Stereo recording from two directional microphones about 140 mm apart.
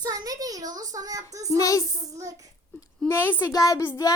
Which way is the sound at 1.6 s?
25° left (ahead or behind).